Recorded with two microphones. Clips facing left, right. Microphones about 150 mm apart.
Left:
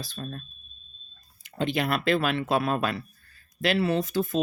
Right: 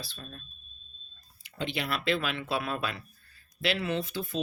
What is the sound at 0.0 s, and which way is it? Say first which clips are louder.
Speech: left 8 dB; 45° left (ahead or behind).